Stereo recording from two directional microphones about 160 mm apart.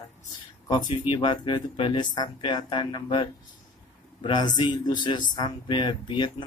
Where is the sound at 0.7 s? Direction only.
25° left (ahead or behind).